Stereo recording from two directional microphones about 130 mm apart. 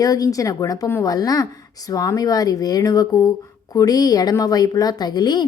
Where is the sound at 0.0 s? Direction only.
30° left (ahead or behind).